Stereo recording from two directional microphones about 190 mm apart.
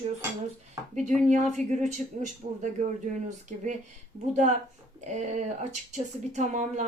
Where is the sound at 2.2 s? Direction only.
40° right (ahead or behind).